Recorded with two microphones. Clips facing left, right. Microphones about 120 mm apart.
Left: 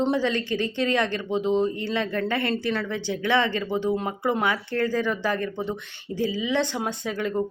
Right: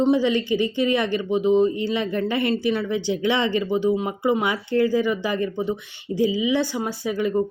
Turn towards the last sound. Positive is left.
turn(degrees=-10)  # may be behind; listen again after turning